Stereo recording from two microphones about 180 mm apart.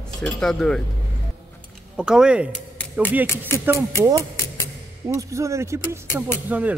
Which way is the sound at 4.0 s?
20° right (ahead or behind).